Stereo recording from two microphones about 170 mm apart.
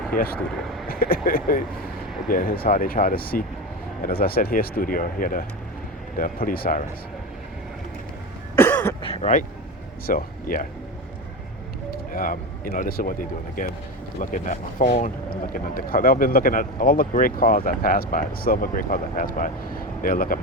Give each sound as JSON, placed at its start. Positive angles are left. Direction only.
{"t": 0.1, "sound": "speech", "side_deg": 55}
{"t": 8.5, "sound": "cough", "side_deg": 15}
{"t": 9.0, "sound": "vehicle", "side_deg": 30}
{"t": 10.1, "sound": "speech", "side_deg": 55}
{"t": 11.9, "sound": "speech", "side_deg": 55}